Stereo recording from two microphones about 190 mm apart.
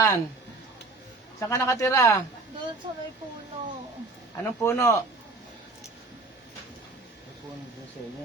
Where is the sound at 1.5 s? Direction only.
15° left (ahead or behind).